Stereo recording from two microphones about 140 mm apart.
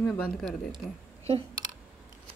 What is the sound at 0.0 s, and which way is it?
Speech, 10° left (ahead or behind).